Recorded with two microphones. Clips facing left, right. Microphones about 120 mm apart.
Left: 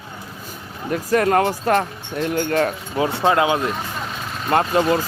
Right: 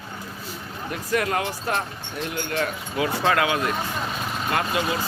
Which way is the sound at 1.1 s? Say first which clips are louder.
Left 7 dB; 45° left (ahead or behind).